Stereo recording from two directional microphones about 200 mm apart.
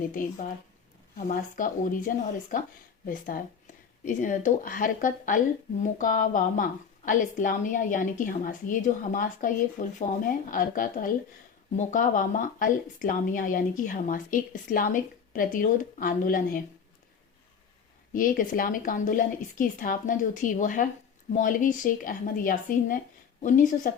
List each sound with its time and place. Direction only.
1.1 s speech: 45° left (ahead or behind)
3.1 s a woman's voice: 40° left (ahead or behind)
18.1 s a woman's voice: 45° left (ahead or behind)